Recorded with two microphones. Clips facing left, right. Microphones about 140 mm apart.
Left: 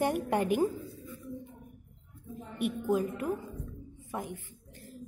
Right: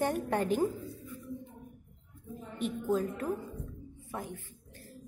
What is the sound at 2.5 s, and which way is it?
A woman's voice, 10° left (ahead or behind).